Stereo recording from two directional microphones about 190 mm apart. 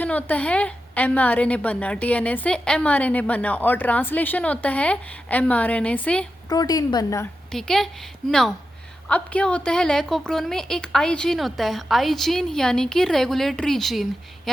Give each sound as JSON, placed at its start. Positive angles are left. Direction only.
{"t": 0.0, "sound": "a woman's voice", "side_deg": 10}
{"t": 6.5, "sound": "a woman's voice", "side_deg": 20}
{"t": 7.5, "sound": "a woman's voice", "side_deg": 0}